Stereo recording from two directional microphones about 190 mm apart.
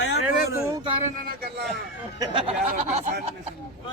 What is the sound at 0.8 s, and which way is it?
Speech, 30° right (ahead or behind).